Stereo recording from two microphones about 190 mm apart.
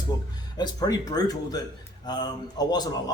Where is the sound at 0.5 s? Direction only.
20° left (ahead or behind).